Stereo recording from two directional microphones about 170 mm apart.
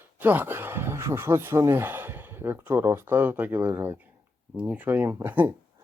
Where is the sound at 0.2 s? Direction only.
10° right (ahead or behind).